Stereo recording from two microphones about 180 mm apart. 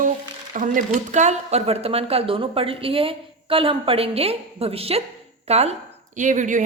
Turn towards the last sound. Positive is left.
turn(degrees=-45)  # may be behind; listen again after turning